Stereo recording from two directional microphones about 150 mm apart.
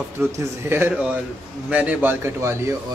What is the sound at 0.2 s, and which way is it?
Speech, 15° right (ahead or behind).